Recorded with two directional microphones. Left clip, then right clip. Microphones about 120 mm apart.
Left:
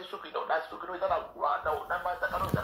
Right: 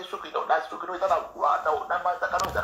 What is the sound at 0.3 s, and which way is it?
Speech, 35° right (ahead or behind).